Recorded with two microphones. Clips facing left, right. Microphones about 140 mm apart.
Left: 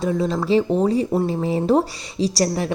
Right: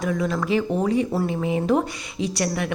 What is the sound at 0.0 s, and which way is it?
A woman's voice, 30° left (ahead or behind).